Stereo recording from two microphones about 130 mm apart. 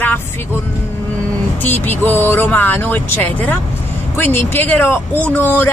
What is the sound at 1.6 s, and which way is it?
Speech, 15° left (ahead or behind).